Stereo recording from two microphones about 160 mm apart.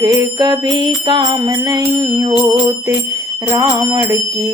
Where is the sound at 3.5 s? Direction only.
25° right (ahead or behind).